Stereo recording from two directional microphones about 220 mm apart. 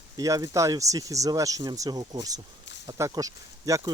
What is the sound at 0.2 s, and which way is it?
Speech, 15° right (ahead or behind).